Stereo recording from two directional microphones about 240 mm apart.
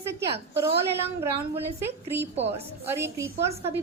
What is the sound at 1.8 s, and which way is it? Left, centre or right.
A woman's voice, centre.